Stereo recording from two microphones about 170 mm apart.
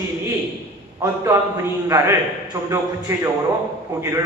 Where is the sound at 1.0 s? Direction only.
20° right (ahead or behind).